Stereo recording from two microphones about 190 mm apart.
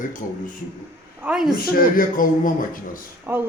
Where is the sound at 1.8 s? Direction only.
45° left (ahead or behind).